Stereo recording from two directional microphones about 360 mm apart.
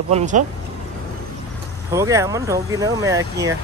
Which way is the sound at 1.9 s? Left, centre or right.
Centre.